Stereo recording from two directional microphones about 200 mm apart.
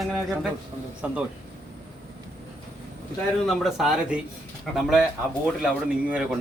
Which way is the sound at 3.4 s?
Centre (ahead or behind).